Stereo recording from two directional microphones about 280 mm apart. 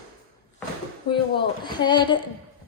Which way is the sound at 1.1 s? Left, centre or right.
Centre.